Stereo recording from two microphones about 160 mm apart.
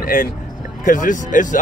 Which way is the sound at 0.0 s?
60° left (ahead or behind).